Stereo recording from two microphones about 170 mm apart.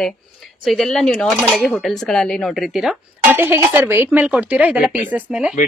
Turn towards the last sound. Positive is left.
turn(degrees=-10)  # may be behind; listen again after turning